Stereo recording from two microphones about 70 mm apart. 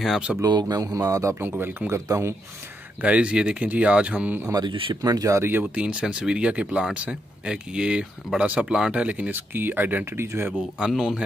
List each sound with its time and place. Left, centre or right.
0.5 s speech: right
1.6 s speech: right
2.0 s speech: right
3.0 s speech: centre
4.5 s speech: right
5.4 s speech: right
5.8 s speech: centre
10.1 s speech: right
10.9 s speech: centre